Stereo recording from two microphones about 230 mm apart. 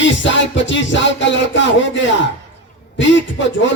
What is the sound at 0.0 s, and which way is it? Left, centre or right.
Music, left.